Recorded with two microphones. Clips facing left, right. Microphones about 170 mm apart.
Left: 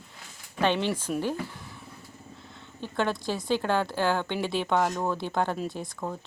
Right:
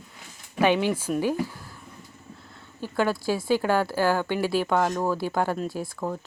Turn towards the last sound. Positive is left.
turn(degrees=-5)  # may be behind; listen again after turning